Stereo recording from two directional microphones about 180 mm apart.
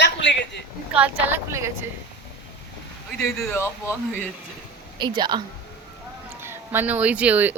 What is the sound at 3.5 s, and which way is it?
Speech, 10° left (ahead or behind).